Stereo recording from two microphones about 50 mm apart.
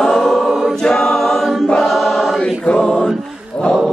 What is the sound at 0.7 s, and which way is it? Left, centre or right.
Choir, centre.